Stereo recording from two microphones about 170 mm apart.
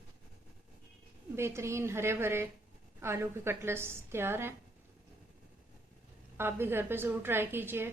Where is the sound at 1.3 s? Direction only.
15° right (ahead or behind).